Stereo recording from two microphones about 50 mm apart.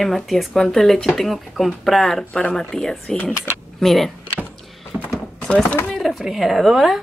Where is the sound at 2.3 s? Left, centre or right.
Left.